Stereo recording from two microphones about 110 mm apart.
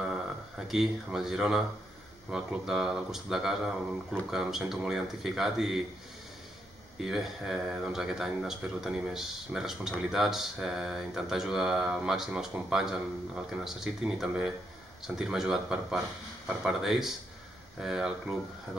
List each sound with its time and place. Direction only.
0.0 s a sound: 5° right (ahead or behind)
2.3 s speech: 5° right (ahead or behind)
7.0 s speech: 5° right (ahead or behind)